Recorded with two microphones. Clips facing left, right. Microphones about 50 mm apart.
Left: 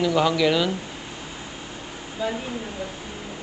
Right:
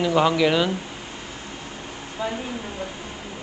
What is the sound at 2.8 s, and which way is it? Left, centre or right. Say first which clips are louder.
Speech: right 1 dB; right.